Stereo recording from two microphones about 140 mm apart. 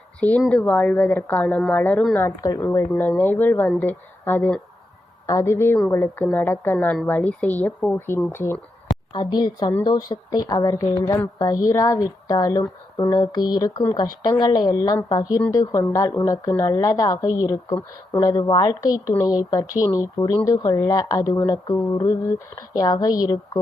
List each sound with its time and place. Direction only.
0.2 s speech: 10° left (ahead or behind)
2.1 s speech: 20° left (ahead or behind)
9.1 s speech: 30° left (ahead or behind)